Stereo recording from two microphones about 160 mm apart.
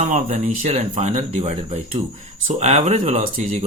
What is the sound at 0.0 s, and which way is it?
Speech, 45° right (ahead or behind).